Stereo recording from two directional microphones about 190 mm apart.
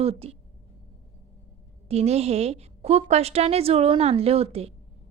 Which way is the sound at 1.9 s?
35° right (ahead or behind).